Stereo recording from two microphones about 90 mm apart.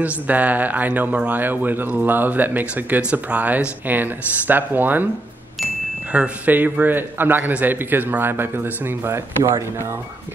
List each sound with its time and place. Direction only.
0.0 s speech: 15° right (ahead or behind)
6.1 s speech: 15° right (ahead or behind)